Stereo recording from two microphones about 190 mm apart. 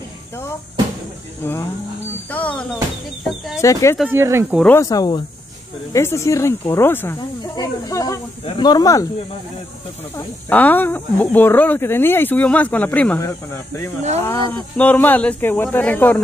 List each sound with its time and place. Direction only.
1.4 s speech: 10° left (ahead or behind)
4.0 s speech: 10° right (ahead or behind)
4.7 s speech: 20° left (ahead or behind)
10.1 s speech: 10° left (ahead or behind)